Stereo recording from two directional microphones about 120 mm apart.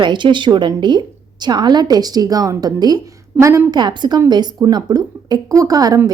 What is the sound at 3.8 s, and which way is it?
A woman's voice, 40° right (ahead or behind).